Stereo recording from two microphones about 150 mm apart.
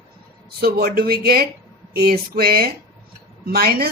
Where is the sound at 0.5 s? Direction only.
90° right.